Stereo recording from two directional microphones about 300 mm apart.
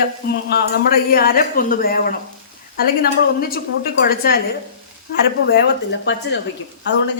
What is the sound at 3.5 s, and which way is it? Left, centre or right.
Speech, left.